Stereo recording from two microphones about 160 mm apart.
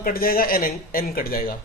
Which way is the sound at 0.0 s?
65° left (ahead or behind).